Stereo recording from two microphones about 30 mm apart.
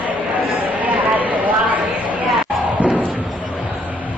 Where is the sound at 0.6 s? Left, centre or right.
Right.